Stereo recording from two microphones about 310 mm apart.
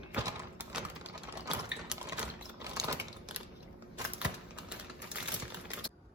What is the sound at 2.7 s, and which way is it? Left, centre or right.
Typewriter, centre.